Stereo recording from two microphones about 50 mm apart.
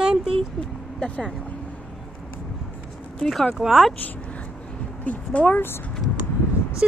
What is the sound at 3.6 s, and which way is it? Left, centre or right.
Speech, centre.